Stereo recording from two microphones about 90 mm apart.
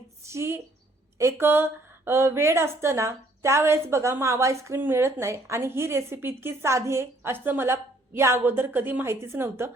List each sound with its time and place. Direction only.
0.2 s a woman's voice: 30° right (ahead or behind)